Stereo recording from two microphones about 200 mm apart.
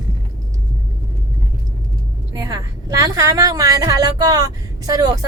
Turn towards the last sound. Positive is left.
turn(degrees=-20)  # may be behind; listen again after turning